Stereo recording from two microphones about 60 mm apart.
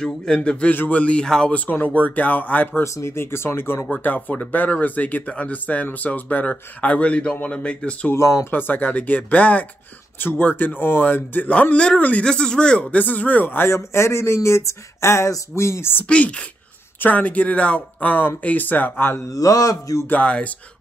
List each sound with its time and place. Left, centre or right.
0.0 s a man's voice: centre
1.5 s speech: left
2.8 s speech: left
3.9 s speech: left
8.1 s speech: left
8.5 s a man's voice: left
12.3 s speech: centre; by 13.7 s left
13.7 s speech: left
16.1 s speech: centre; by 19.2 s left
19.3 s speech: left
20.1 s speech: centre